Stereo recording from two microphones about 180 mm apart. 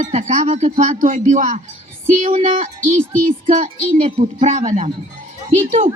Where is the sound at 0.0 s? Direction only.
40° right (ahead or behind).